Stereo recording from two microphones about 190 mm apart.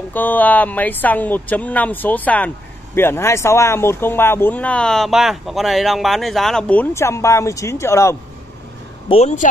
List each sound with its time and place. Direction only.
0.1 s speech: 10° left (ahead or behind)
9.1 s speech: 35° left (ahead or behind)